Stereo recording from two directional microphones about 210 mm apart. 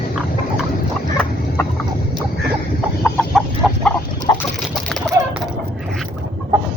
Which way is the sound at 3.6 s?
Centre (ahead or behind).